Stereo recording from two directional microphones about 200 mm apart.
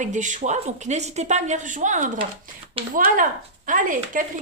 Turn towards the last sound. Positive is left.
turn(degrees=-40)  # may be behind; listen again after turning